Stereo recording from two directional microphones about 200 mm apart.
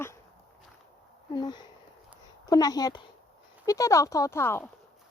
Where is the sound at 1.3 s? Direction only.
20° left (ahead or behind).